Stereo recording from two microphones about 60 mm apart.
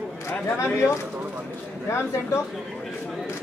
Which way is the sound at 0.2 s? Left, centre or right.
Left.